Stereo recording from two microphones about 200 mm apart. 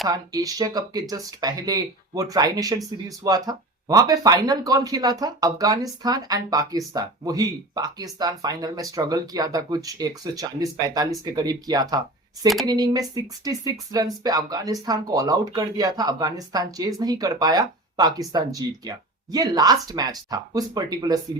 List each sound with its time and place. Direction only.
0.1 s speech: 15° right (ahead or behind)